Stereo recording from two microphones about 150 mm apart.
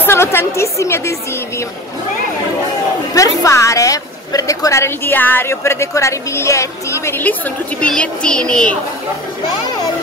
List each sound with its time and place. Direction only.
0.0 s a woman's voice: 15° left (ahead or behind)
3.2 s a woman's voice: 20° left (ahead or behind)